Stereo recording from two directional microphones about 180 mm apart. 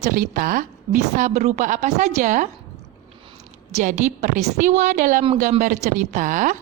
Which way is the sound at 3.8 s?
45° right (ahead or behind).